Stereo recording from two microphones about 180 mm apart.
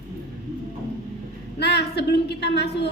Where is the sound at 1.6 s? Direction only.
70° left (ahead or behind).